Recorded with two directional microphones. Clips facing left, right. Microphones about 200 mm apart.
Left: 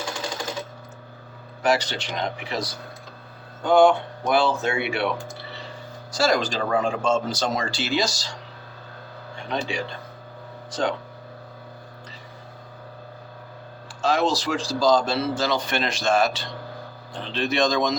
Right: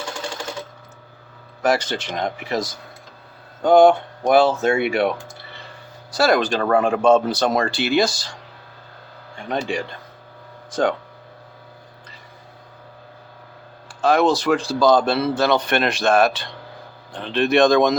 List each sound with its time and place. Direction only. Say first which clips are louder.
1.6 s speech: right 2 dB; 50° right (ahead or behind)
6.1 s a man's voice: right 4 dB; 60° right (ahead or behind)
9.5 s speech: right 4 dB; 50° right (ahead or behind)
14.0 s a man's voice: right 5 dB; 55° right (ahead or behind)